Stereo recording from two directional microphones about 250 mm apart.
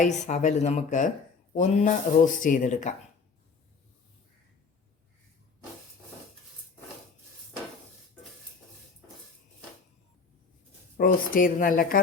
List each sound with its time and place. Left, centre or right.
0.0 s speech: left
10.9 s speech: left